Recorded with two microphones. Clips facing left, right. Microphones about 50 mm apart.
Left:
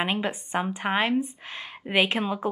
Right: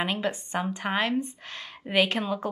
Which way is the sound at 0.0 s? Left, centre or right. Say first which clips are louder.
Left 1 dB; centre.